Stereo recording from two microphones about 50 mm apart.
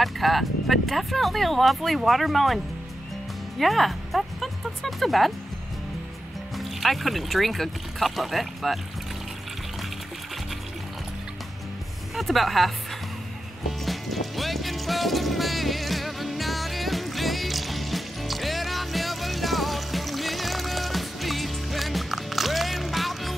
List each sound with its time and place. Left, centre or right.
0.0 s speech: centre
6.6 s speech: centre
12.2 s speech: centre
13.8 s music: centre